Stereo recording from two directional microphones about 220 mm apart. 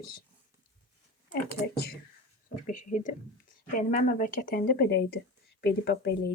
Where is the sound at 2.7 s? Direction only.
35° left (ahead or behind).